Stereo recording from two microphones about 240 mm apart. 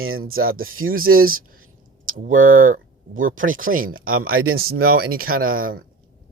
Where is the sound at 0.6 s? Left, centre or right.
Right.